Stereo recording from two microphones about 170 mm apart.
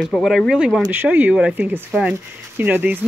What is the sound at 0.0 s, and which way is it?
Speech, centre (ahead or behind).